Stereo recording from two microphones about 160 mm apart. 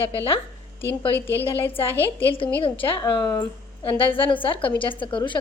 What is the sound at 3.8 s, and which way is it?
A woman's voice, 35° left (ahead or behind).